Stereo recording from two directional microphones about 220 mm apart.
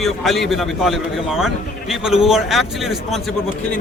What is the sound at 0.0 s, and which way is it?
A man's voice, centre (ahead or behind).